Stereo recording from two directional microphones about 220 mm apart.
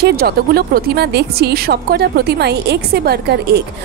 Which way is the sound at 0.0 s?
45° right (ahead or behind).